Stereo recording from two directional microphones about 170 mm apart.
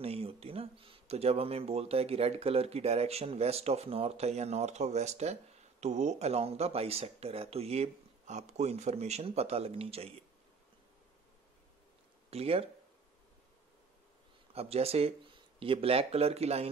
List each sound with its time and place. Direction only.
0.0 s speech: 35° right (ahead or behind)
12.3 s speech: 35° right (ahead or behind)
14.5 s speech: 35° right (ahead or behind)